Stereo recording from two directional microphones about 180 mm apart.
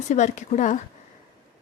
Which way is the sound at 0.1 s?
40° left (ahead or behind).